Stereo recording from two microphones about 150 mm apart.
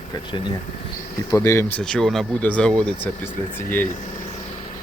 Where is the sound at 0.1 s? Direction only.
30° left (ahead or behind).